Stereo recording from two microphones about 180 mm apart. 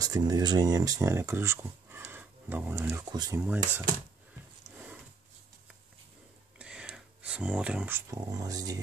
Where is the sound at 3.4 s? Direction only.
10° right (ahead or behind).